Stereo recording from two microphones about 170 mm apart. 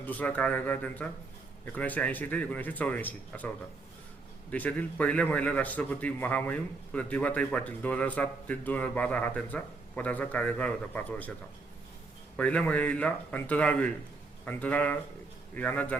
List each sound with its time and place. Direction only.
0.0 s a man's voice: 10° left (ahead or behind)
4.5 s a man's voice: 10° left (ahead or behind)
12.4 s a man's voice: 10° left (ahead or behind)